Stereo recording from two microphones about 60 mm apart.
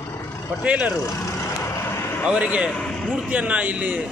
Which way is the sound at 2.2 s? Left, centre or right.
Centre.